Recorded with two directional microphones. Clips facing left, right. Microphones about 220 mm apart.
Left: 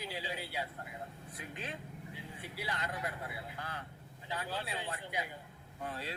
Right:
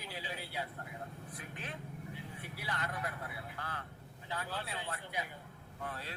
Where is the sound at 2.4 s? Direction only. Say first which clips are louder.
Left 2 dB; 15° left (ahead or behind).